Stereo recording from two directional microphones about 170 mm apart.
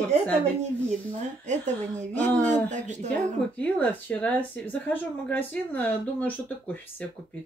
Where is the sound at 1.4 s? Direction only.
45° right (ahead or behind).